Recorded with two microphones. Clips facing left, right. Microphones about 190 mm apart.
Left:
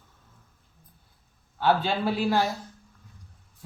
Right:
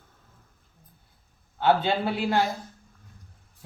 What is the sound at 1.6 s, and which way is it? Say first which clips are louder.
Speech: right 1 dB; 20° right (ahead or behind).